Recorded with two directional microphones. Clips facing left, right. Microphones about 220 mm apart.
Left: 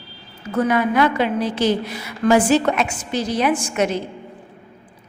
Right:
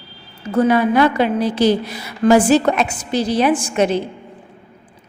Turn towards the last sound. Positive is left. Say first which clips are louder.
# right 4 dB
turn(degrees=-30)  # may be behind; listen again after turning